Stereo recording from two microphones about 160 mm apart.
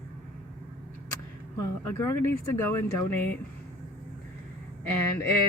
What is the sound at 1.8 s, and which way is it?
Speech, 15° left (ahead or behind).